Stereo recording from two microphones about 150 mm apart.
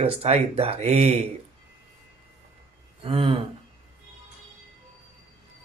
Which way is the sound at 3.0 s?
35° right (ahead or behind).